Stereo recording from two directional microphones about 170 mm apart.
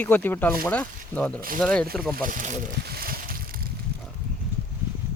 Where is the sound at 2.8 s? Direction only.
65° right (ahead or behind).